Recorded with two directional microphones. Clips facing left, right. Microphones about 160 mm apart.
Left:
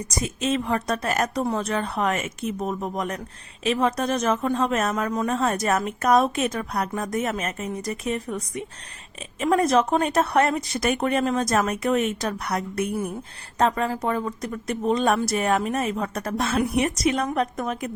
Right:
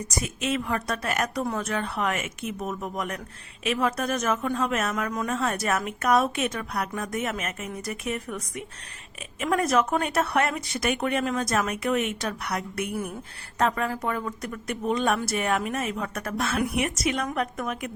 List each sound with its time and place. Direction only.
0.2 s a woman's voice: 30° left (ahead or behind)